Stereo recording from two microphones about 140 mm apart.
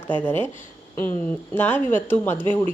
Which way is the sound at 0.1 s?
10° left (ahead or behind).